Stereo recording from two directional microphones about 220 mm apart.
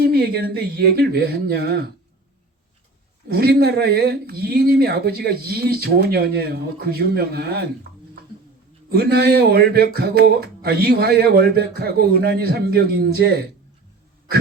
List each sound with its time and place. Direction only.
0.0 s speech: 45° right (ahead or behind)
3.2 s speech: 45° right (ahead or behind)
8.9 s speech: 45° right (ahead or behind)